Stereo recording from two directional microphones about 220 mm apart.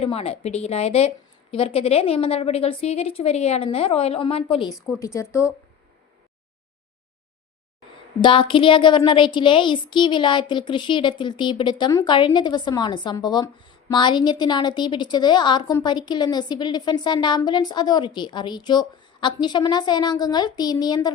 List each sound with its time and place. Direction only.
0.0 s a woman's voice: 25° left (ahead or behind)
4.9 s speech: 15° left (ahead or behind)
8.2 s a woman's voice: 25° left (ahead or behind)